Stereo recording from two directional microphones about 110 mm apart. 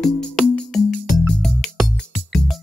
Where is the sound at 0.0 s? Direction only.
5° left (ahead or behind).